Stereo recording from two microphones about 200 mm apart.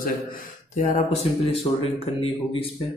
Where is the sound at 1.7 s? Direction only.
20° left (ahead or behind).